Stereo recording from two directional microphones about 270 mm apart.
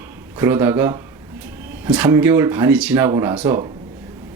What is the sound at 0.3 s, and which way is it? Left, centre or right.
Speech, centre.